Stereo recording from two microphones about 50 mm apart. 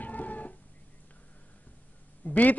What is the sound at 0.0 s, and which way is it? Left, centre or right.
Cat, left.